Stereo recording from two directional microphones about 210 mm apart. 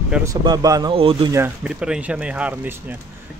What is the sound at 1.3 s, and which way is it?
Speech, 10° right (ahead or behind).